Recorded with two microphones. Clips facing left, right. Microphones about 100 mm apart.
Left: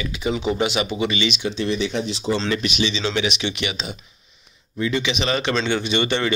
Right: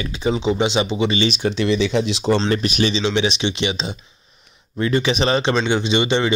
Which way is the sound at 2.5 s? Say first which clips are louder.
Right 4 dB; 45° right (ahead or behind).